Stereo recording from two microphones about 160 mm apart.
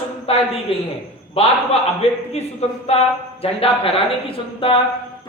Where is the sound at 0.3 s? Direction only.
40° left (ahead or behind).